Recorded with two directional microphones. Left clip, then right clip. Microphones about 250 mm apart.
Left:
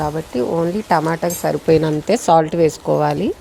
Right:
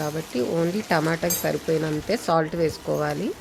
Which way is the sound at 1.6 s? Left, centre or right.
Left.